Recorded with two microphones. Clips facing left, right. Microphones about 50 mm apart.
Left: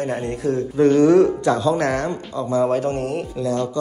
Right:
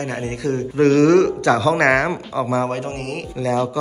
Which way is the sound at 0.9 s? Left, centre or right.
Right.